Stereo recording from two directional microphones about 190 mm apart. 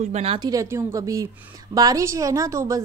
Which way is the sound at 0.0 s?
35° right (ahead or behind).